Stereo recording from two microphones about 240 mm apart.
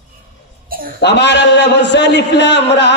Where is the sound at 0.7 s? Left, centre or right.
Right.